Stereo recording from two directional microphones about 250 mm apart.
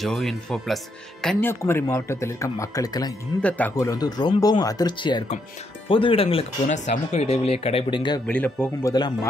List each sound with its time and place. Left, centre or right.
0.0 s speech: centre
8.3 s speech: centre